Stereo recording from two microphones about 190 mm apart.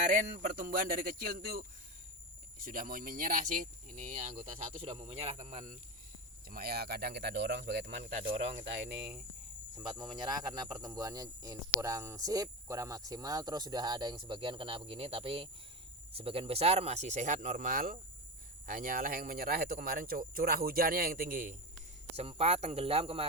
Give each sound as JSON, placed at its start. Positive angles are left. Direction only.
{"t": 0.0, "sound": "speech", "side_deg": -40}
{"t": 6.5, "sound": "speech", "side_deg": -55}
{"t": 8.2, "sound": "speech", "side_deg": -30}
{"t": 10.0, "sound": "speech", "side_deg": -20}
{"t": 22.1, "sound": "speech", "side_deg": -30}